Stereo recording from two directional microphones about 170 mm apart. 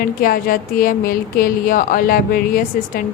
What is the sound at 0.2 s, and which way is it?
A woman's voice, 55° left (ahead or behind).